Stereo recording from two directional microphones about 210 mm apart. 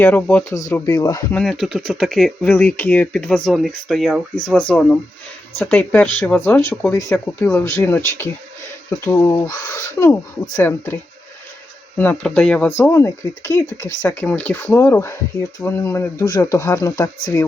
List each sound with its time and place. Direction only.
0.0 s speech: 10° left (ahead or behind)
0.7 s speech: 20° left (ahead or behind)
1.3 s speech: centre (ahead or behind)
12.2 s speech: 5° left (ahead or behind)